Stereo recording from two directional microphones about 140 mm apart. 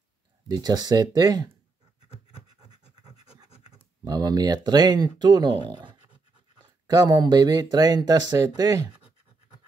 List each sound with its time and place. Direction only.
0.5 s speech: 30° right (ahead or behind)
2.7 s scratch: 30° right (ahead or behind)
4.0 s a sound: 30° right (ahead or behind)
4.6 s speech: 30° right (ahead or behind)